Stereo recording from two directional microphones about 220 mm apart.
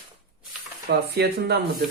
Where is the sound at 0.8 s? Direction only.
45° right (ahead or behind).